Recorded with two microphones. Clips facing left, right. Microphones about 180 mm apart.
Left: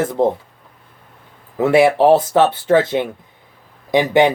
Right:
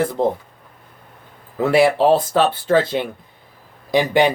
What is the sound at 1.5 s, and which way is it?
Speech, 20° left (ahead or behind).